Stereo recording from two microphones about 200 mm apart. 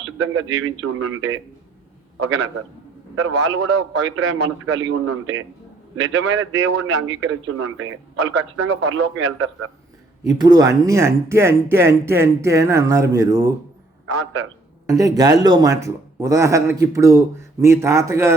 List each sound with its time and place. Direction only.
0.0 s a man's voice: 90° right
2.1 s a man's voice: 75° right (ahead or behind)
10.2 s speech: 20° right (ahead or behind)
14.1 s a man's voice: 70° right (ahead or behind)
14.8 s speech: 15° right (ahead or behind)